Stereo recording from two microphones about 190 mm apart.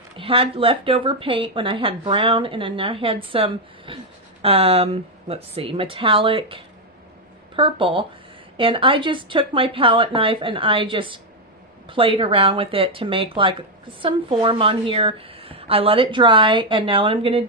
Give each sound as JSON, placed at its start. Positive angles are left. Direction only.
{"t": 0.2, "sound": "speech", "side_deg": -30}